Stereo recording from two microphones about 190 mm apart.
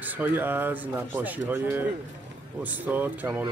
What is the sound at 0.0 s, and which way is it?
Speech, 10° right (ahead or behind).